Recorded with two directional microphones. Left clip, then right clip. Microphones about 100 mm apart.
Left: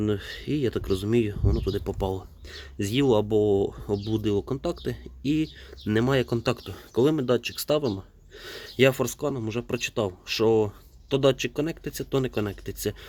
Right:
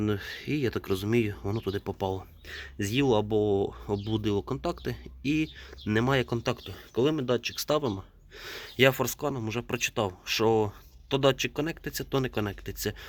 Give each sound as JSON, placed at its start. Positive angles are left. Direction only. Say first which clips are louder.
{"t": 0.0, "sound": "speech", "louder": "left 3 dB", "side_deg": 15}
{"t": 6.4, "sound": "speech", "louder": "left 4 dB", "side_deg": 55}
{"t": 7.5, "sound": "speech", "louder": "left 3 dB", "side_deg": 30}